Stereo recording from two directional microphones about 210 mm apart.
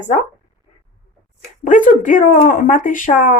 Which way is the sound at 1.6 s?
40° left (ahead or behind).